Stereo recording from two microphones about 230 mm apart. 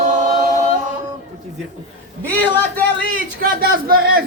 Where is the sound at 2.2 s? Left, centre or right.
Centre.